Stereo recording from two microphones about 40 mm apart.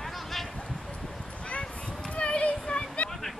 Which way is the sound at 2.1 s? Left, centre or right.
Left.